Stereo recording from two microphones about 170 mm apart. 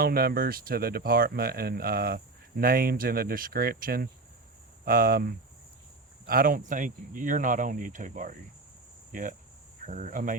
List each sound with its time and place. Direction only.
0.0 s speech: 65° right (ahead or behind)
6.2 s speech: 55° right (ahead or behind)
9.8 s speech: 45° right (ahead or behind)